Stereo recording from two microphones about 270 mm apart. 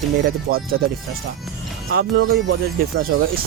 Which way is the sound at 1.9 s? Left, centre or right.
Right.